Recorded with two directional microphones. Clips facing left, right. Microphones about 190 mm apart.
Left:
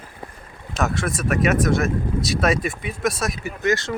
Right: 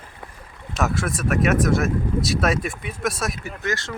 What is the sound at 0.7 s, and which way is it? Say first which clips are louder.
Speech: even; 5° right (ahead or behind).